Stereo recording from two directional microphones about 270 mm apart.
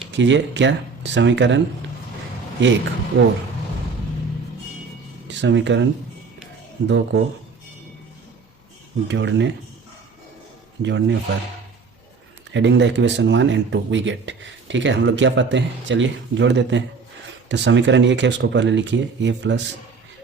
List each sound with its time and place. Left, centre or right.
0.1 s speech: right
5.3 s speech: right
9.0 s speech: right
10.8 s speech: right
12.5 s speech: right